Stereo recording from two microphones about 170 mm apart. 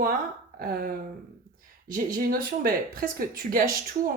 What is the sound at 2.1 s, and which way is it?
Speech, 60° right (ahead or behind).